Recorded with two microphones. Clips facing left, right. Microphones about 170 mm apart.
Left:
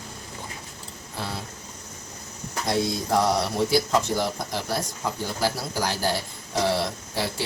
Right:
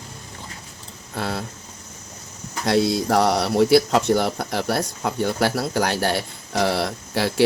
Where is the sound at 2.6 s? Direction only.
80° right.